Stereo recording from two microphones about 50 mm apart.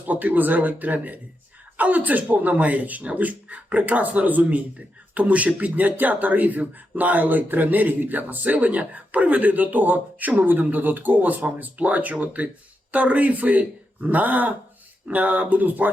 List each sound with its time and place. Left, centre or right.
0.0 s speech: right